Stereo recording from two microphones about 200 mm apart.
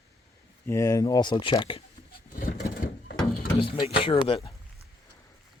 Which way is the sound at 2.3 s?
45° left (ahead or behind).